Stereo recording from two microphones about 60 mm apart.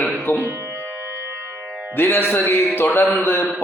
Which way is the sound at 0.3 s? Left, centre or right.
Left.